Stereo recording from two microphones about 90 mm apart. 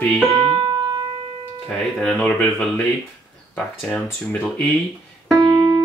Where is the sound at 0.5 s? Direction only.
50° right (ahead or behind).